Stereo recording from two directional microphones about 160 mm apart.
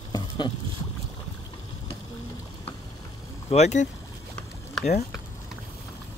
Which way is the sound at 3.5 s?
45° left (ahead or behind).